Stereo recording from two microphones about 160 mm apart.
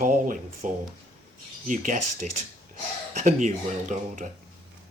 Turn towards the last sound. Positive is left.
turn(degrees=-50)  # may be behind; listen again after turning